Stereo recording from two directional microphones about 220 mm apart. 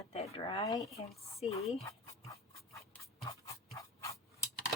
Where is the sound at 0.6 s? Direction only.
15° left (ahead or behind).